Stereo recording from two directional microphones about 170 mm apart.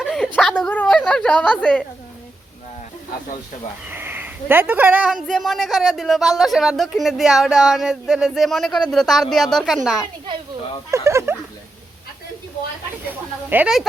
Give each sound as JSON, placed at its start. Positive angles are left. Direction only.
{"t": 0.0, "sound": "a sound", "side_deg": 5}
{"t": 3.8, "sound": "a woman's voice", "side_deg": -10}
{"t": 10.9, "sound": "speech", "side_deg": -15}
{"t": 13.1, "sound": "speech", "side_deg": -10}